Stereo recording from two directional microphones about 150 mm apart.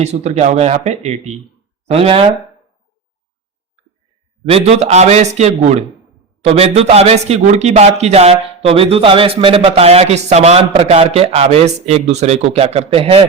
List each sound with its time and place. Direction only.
0.0 s speech: 45° right (ahead or behind)
4.4 s speech: 40° right (ahead or behind)